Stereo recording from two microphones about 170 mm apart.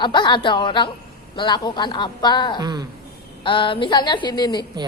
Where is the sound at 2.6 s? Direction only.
25° right (ahead or behind).